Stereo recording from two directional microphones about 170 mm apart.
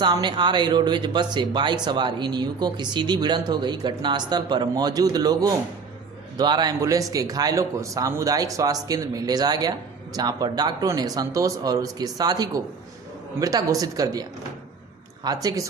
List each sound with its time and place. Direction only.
0.0 s speech: 25° right (ahead or behind)
15.2 s speech: 20° right (ahead or behind)